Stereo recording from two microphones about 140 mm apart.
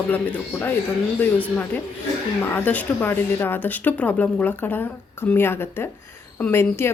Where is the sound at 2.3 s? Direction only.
15° left (ahead or behind).